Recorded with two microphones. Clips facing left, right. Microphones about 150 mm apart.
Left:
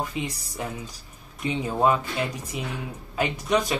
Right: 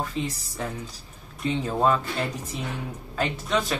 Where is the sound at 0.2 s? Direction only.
10° left (ahead or behind).